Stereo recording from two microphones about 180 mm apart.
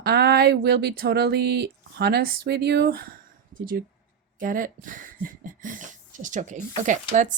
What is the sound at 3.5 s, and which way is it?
Speech, 50° right (ahead or behind).